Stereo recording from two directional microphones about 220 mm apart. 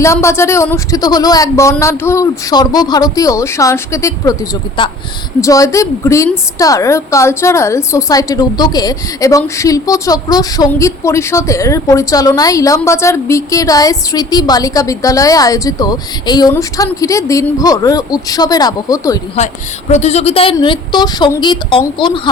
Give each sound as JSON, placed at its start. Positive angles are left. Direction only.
{"t": 0.0, "sound": "a woman's voice", "side_deg": 10}
{"t": 19.9, "sound": "a woman's voice", "side_deg": 30}